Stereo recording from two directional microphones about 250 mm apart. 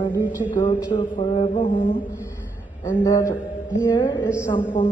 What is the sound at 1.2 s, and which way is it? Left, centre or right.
Speech, centre.